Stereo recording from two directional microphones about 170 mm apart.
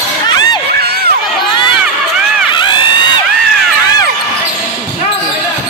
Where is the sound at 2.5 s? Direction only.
25° left (ahead or behind).